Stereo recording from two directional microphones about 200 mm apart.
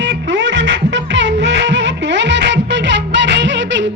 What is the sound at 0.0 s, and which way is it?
Music, 65° right (ahead or behind).